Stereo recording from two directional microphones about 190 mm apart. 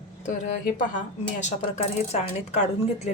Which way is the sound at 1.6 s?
35° left (ahead or behind).